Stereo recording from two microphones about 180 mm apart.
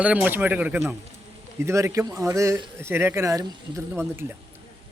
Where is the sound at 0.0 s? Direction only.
5° right (ahead or behind).